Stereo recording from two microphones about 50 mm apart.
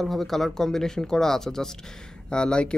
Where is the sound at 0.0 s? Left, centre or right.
Centre.